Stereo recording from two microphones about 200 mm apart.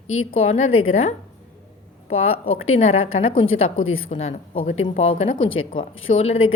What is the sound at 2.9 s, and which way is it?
A woman's voice, 90° left.